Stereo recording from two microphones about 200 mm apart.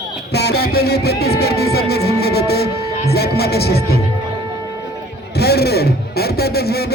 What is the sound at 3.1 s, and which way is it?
Speech, 55° left (ahead or behind).